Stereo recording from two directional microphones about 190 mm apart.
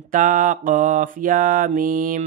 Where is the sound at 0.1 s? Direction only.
45° right (ahead or behind).